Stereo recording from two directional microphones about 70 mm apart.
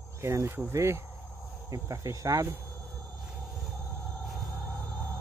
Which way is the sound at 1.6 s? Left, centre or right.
Right.